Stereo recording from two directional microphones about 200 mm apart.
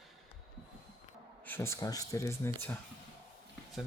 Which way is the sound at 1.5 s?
15° left (ahead or behind).